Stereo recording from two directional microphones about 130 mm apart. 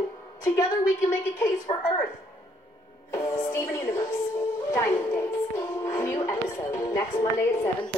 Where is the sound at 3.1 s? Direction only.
20° left (ahead or behind).